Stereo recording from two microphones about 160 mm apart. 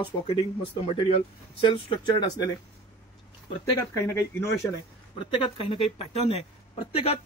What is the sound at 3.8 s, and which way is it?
Speech, 20° left (ahead or behind).